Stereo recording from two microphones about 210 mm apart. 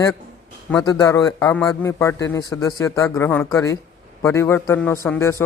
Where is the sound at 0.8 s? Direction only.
15° left (ahead or behind).